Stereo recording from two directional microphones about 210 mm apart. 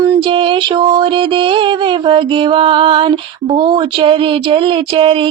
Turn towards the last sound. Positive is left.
turn(degrees=-25)  # may be behind; listen again after turning